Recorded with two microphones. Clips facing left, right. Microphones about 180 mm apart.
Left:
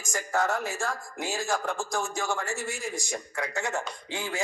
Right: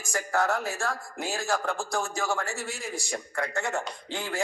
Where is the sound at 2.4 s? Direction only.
15° left (ahead or behind).